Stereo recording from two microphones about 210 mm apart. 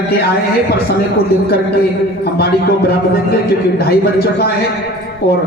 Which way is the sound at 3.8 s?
50° left (ahead or behind).